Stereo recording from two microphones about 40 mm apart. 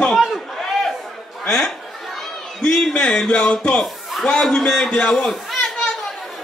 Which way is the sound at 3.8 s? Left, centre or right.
Centre.